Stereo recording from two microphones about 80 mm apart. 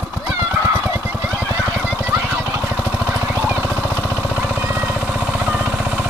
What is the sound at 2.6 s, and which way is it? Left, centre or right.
Vehicle, right.